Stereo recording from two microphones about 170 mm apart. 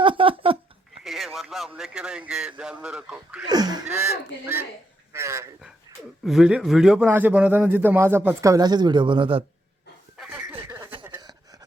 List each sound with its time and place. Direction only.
0.0 s a sound: 30° right (ahead or behind)
1.0 s speech: centre (ahead or behind)
3.4 s speech: 25° right (ahead or behind)
3.8 s a man's voice: 10° right (ahead or behind)
6.2 s a man's voice: 5° right (ahead or behind); by 9.4 s 30° right (ahead or behind)
10.2 s chuckle: 10° right (ahead or behind)